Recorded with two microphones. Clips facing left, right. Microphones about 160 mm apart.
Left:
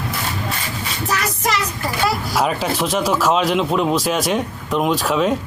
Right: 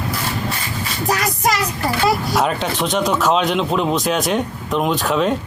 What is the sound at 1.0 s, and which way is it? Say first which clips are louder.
Child singing: right 3 dB; 35° right (ahead or behind).